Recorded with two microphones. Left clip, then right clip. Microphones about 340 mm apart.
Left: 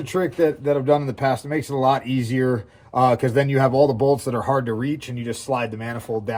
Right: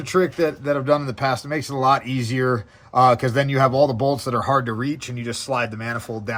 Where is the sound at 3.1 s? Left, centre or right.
Right.